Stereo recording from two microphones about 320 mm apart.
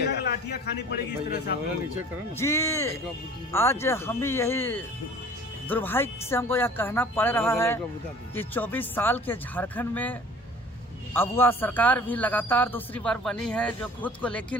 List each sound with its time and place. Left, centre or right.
0.0 s a man's voice: left
2.3 s a man's voice: centre